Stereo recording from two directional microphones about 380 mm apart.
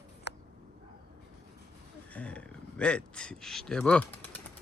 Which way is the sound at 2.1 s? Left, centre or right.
Centre.